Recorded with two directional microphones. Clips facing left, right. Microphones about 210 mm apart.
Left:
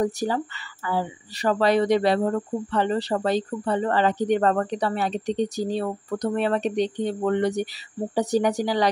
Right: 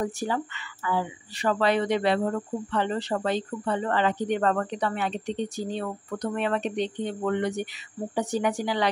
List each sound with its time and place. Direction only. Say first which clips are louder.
0.0 s speech: left 4 dB; 35° left (ahead or behind)